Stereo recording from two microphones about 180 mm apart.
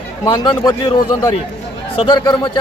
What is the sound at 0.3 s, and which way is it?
A man's voice, 25° left (ahead or behind).